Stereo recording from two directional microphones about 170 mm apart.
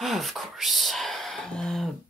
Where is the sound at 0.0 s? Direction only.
Centre (ahead or behind).